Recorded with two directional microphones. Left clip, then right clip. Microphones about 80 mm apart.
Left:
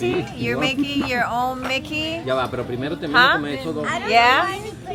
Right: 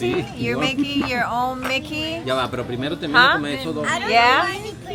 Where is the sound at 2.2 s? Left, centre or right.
Right.